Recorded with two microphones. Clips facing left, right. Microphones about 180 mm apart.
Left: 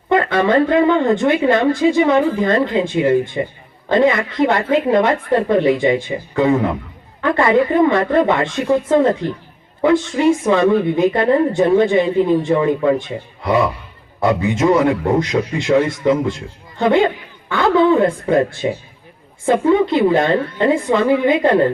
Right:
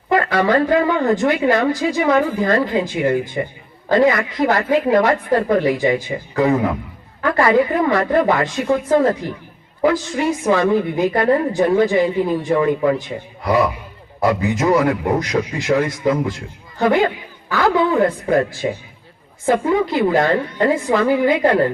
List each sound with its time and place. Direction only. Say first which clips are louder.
0.1 s a man's voice: left 2 dB; 25° left (ahead or behind)